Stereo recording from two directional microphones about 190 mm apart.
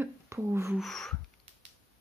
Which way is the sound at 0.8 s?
Centre (ahead or behind).